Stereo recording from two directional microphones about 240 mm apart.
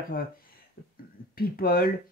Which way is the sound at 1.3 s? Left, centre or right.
Left.